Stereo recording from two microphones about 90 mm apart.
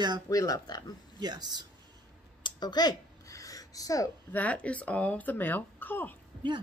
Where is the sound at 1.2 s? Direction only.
50° right (ahead or behind).